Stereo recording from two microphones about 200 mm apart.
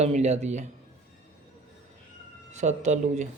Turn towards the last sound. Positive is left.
turn(degrees=-35)  # may be behind; listen again after turning